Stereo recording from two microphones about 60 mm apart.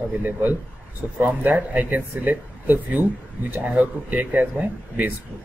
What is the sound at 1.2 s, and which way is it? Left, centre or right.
Speech, right.